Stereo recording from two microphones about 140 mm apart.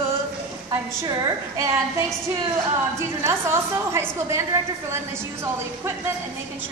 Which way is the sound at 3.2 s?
20° right (ahead or behind).